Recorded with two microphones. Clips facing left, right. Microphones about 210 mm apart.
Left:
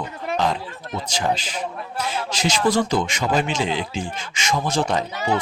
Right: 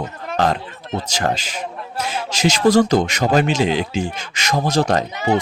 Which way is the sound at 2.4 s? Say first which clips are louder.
Right 6 dB; 45° right (ahead or behind).